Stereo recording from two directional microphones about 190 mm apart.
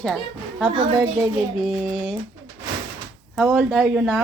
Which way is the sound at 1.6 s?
Centre (ahead or behind).